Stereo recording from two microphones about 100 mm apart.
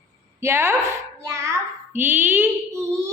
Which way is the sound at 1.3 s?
30° right (ahead or behind).